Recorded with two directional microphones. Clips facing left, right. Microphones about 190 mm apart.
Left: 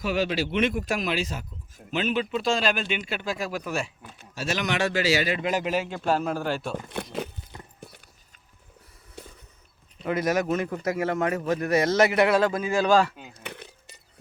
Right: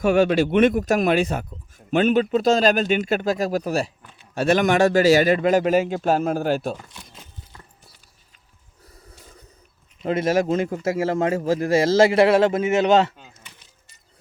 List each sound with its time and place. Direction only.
0.0 s speech: 50° right (ahead or behind)
4.4 s speech: 55° right (ahead or behind)
6.9 s speech: 65° left (ahead or behind)
9.2 s a sound: 65° left (ahead or behind)
10.0 s a man's voice: 30° right (ahead or behind)
13.4 s a sound: 60° left (ahead or behind)